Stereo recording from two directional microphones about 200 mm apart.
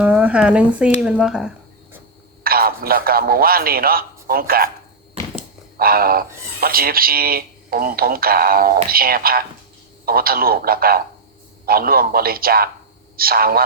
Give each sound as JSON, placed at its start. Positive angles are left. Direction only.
{"t": 0.0, "sound": "speech", "side_deg": -5}
{"t": 2.4, "sound": "a man's voice", "side_deg": -45}
{"t": 5.7, "sound": "speech", "side_deg": -50}